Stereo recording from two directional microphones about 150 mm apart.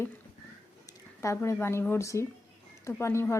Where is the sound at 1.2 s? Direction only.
20° left (ahead or behind).